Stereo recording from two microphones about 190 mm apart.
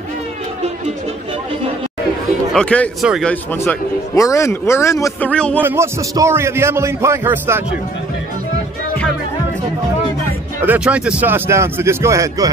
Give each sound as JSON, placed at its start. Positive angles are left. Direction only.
{"t": 2.5, "sound": "speech", "side_deg": 5}
{"t": 3.5, "sound": "a man's voice", "side_deg": 15}
{"t": 5.6, "sound": "a man's voice", "side_deg": -10}
{"t": 10.6, "sound": "a man's voice", "side_deg": -10}